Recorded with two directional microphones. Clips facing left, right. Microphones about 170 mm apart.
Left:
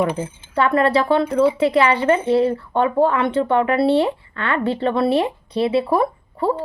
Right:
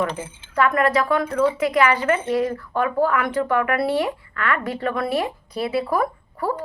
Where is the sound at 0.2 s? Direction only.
30° left (ahead or behind).